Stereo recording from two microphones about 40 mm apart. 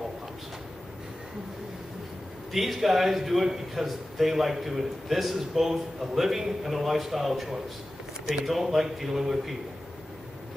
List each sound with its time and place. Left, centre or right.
2.5 s a man's voice: centre